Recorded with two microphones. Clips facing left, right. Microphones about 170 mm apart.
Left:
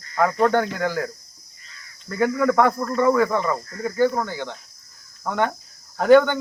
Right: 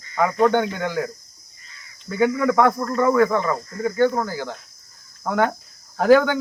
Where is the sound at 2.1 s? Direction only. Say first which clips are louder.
Right 1 dB; centre (ahead or behind).